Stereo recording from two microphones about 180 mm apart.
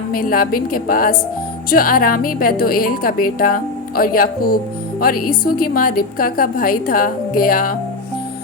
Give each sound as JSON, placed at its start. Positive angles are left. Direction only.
{"t": 0.1, "sound": "a woman's voice", "side_deg": 55}